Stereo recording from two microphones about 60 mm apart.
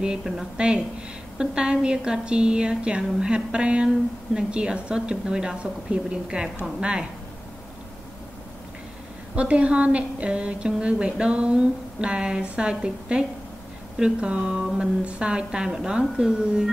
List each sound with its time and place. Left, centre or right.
0.0 s a woman's voice: centre
9.3 s a woman's voice: right